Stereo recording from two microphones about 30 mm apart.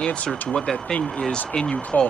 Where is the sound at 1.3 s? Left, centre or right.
Left.